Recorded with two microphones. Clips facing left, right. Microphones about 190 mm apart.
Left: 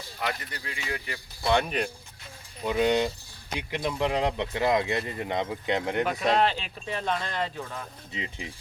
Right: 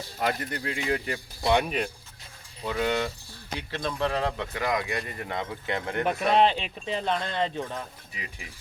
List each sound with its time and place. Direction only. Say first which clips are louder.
0.2 s speech: right 5 dB; 50° right (ahead or behind)
1.6 s speech: even; 5° right (ahead or behind)
2.6 s speech: left 3 dB; 20° left (ahead or behind)
6.1 s speech: right 5 dB; 25° right (ahead or behind)
8.1 s speech: left 6 dB; 25° left (ahead or behind)